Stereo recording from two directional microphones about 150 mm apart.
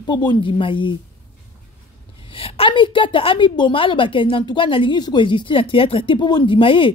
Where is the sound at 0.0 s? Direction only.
30° left (ahead or behind).